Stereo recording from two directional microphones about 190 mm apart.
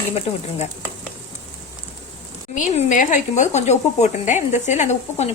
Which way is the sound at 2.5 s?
40° left (ahead or behind).